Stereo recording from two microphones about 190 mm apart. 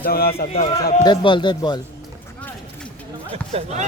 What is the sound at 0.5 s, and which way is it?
A man's voice, 35° left (ahead or behind).